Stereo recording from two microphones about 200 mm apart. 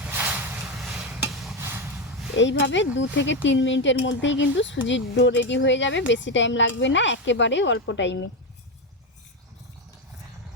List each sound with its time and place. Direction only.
0.0 s rub: 10° right (ahead or behind)
1.5 s a sound: 10° right (ahead or behind)
2.3 s speech: 65° left (ahead or behind)